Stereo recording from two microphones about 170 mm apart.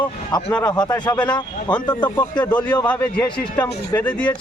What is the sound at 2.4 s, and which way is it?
Speech, 10° left (ahead or behind).